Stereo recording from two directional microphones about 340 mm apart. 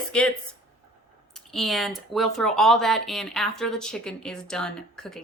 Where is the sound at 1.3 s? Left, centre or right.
Centre.